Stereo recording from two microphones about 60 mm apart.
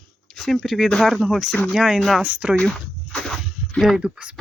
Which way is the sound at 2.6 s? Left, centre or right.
Centre.